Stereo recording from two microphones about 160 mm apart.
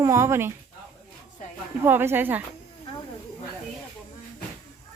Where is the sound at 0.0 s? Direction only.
15° right (ahead or behind).